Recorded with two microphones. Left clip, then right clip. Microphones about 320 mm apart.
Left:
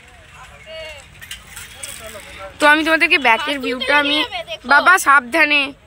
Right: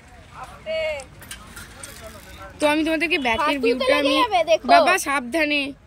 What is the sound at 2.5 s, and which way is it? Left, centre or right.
Speech, centre.